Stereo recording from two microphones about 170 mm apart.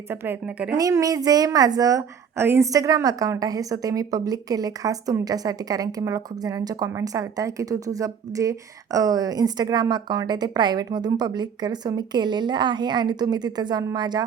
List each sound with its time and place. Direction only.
0.1 s a woman's voice: 10° right (ahead or behind)